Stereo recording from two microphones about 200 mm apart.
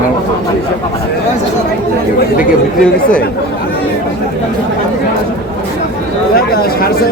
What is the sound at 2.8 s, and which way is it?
Speech, 5° left (ahead or behind).